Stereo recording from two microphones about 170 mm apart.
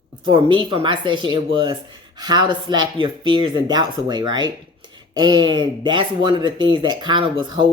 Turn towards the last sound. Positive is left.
turn(degrees=-25)  # may be behind; listen again after turning